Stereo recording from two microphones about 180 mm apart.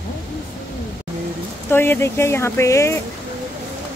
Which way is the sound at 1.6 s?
10° left (ahead or behind).